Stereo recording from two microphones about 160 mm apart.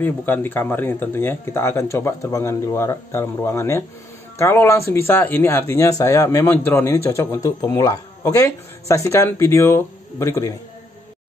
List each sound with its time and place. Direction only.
0.0 s speech: 10° left (ahead or behind)